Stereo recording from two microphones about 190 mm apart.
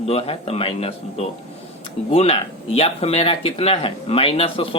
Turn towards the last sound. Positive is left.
turn(degrees=30)  # may be behind; listen again after turning